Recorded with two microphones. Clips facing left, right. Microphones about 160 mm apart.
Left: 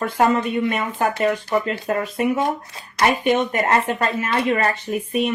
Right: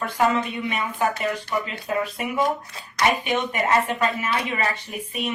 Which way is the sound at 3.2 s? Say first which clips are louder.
Left 5 dB; 50° left (ahead or behind).